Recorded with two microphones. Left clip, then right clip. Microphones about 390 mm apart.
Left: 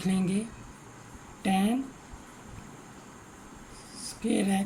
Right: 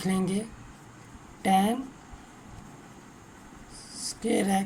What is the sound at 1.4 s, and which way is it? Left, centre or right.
Speech, centre.